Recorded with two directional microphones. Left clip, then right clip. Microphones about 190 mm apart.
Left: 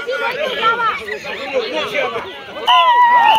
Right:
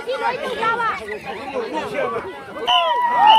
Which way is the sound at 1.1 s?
50° right (ahead or behind).